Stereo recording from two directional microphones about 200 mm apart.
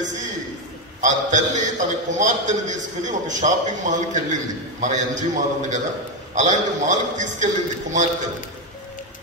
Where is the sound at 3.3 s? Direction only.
40° right (ahead or behind).